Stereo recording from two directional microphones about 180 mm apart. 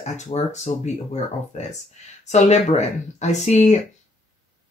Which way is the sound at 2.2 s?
40° left (ahead or behind).